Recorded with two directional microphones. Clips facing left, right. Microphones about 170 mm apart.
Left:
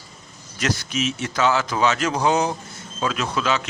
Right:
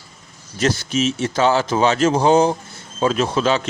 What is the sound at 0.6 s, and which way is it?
Speech, 30° right (ahead or behind).